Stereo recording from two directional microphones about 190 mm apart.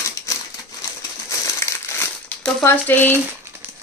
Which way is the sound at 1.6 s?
15° left (ahead or behind).